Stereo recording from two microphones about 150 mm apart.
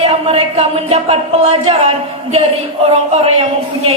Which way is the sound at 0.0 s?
40° right (ahead or behind).